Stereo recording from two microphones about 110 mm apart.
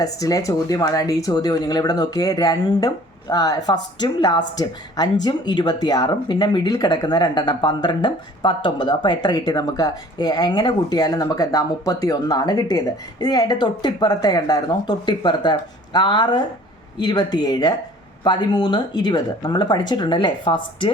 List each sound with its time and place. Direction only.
0.0 s speech: 30° left (ahead or behind)